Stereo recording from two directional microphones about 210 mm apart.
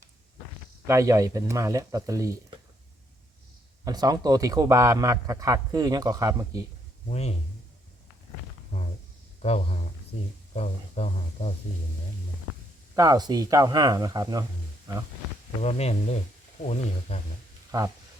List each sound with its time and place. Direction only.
0.9 s a man's voice: 15° right (ahead or behind)
3.8 s a man's voice: 20° right (ahead or behind)
7.1 s speech: 30° left (ahead or behind)
9.4 s speech: 30° left (ahead or behind)
13.0 s a man's voice: 20° right (ahead or behind)
15.6 s speech: 30° left (ahead or behind)
17.7 s speech: 15° right (ahead or behind)